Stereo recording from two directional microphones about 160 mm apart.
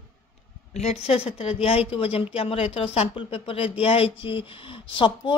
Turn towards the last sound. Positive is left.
turn(degrees=30)  # may be behind; listen again after turning